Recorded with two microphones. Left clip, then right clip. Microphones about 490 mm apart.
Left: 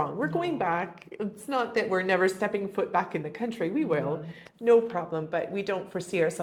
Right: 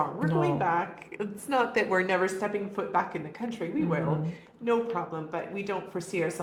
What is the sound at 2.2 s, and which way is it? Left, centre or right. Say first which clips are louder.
Speech: left 2 dB; left.